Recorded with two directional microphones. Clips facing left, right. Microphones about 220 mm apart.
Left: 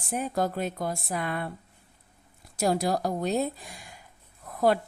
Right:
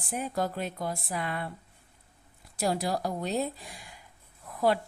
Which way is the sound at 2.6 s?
45° left (ahead or behind).